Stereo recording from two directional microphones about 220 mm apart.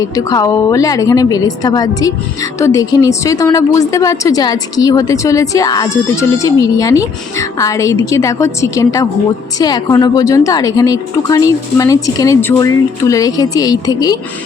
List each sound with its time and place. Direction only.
0.0 s a woman's voice: 15° left (ahead or behind)